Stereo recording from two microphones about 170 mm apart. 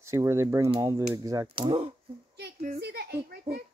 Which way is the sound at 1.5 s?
35° right (ahead or behind).